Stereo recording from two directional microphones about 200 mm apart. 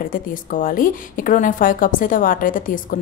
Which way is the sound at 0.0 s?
45° left (ahead or behind).